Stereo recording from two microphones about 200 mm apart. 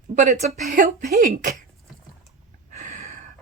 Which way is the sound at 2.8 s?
40° right (ahead or behind).